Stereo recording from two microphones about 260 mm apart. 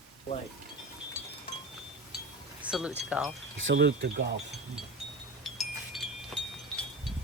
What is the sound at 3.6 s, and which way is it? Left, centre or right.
Speech, right.